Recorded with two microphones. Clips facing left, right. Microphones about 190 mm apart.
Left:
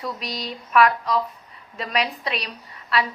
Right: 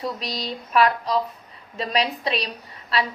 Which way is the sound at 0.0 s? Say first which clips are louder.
Right 2 dB; 30° right (ahead or behind).